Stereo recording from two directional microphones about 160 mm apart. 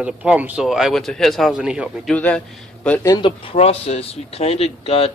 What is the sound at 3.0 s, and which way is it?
Speech, 25° left (ahead or behind).